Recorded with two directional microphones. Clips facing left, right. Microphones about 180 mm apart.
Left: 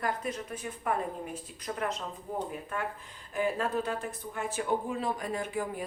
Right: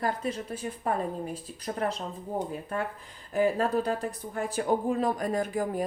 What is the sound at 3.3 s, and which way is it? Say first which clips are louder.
Speech: right 5 dB; 40° right (ahead or behind).